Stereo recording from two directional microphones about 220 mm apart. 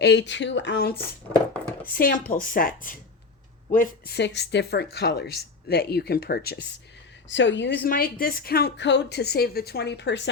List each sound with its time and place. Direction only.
0.0 s a woman's voice: 50° left (ahead or behind)
7.9 s speech: 40° left (ahead or behind)